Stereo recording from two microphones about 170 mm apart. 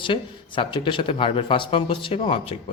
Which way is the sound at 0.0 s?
30° left (ahead or behind).